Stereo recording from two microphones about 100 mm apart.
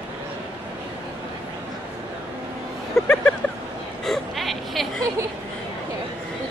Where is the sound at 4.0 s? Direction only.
Centre (ahead or behind).